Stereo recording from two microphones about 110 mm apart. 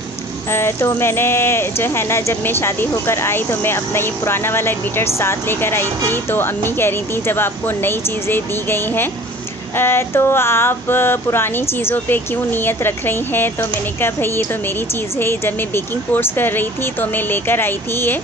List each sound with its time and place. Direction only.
0.5 s speech: 20° left (ahead or behind)